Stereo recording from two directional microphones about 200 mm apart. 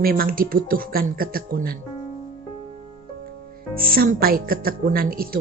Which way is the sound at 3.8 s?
45° right (ahead or behind).